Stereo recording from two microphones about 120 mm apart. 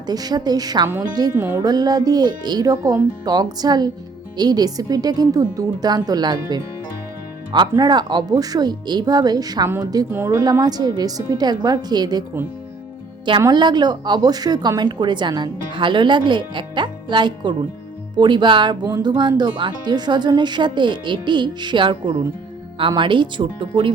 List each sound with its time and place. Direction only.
0.1 s a woman's voice: 35° right (ahead or behind)
1.4 s speech: 15° right (ahead or behind)
1.6 s a woman's voice: 35° right (ahead or behind)
10.1 s a woman's voice: 20° right (ahead or behind)
13.5 s a woman's voice: 40° right (ahead or behind)